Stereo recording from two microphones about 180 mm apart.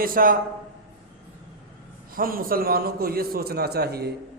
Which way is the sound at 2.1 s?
50° right (ahead or behind).